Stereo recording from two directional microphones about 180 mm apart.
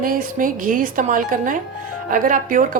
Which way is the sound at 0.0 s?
50° right (ahead or behind).